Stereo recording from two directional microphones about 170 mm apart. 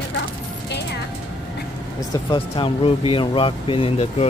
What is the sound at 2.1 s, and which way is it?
Speech, 25° left (ahead or behind).